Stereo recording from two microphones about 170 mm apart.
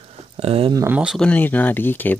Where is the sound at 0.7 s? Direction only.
15° right (ahead or behind).